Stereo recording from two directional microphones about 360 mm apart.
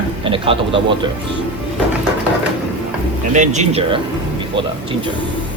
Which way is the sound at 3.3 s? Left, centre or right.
Centre.